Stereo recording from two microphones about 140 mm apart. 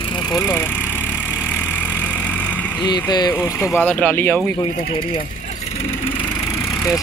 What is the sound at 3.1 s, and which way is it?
Speech, 30° left (ahead or behind).